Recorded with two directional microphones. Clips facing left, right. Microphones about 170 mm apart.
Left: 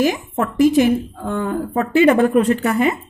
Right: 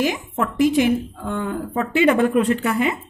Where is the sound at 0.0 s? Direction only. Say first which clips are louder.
Left 3 dB; 45° left (ahead or behind).